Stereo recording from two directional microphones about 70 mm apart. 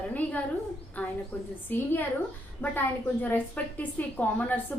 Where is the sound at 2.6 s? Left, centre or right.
Left.